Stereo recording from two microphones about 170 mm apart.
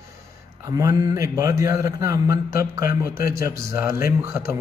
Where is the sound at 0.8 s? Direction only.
20° right (ahead or behind).